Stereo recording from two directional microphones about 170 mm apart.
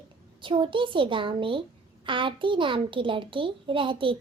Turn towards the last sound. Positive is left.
turn(degrees=-30)  # may be behind; listen again after turning